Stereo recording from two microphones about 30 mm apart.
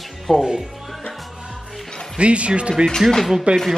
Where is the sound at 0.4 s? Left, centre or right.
Right.